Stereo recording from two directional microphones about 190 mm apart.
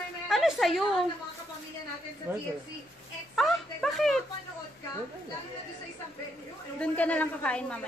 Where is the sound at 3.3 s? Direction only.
Centre (ahead or behind).